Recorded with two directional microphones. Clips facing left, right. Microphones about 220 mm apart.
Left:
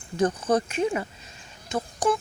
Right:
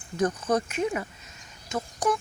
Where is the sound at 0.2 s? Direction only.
30° left (ahead or behind).